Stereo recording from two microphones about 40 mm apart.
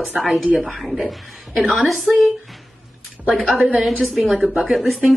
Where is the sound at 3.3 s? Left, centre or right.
Centre.